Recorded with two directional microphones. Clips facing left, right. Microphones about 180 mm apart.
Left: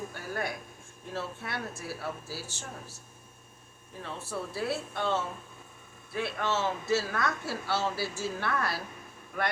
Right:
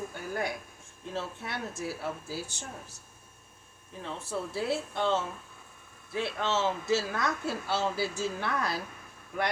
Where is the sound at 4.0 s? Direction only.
20° right (ahead or behind).